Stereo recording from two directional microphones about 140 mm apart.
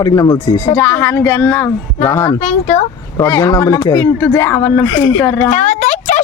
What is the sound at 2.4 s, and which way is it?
Speech, 65° left (ahead or behind).